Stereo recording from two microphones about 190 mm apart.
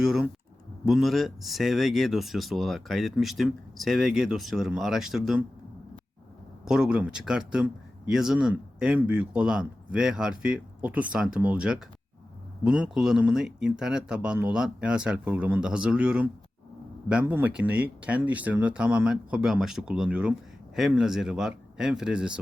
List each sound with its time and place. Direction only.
0.0 s speech: centre (ahead or behind)
6.7 s speech: 5° right (ahead or behind)